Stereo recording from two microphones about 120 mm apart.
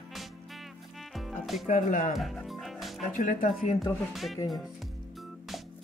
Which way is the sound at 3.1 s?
90° left.